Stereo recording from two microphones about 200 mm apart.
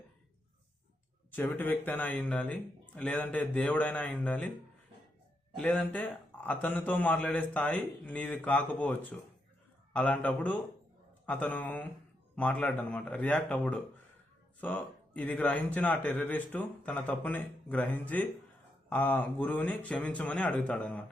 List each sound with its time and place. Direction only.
1.3 s a man's voice: 10° left (ahead or behind)
5.5 s a man's voice: 5° left (ahead or behind)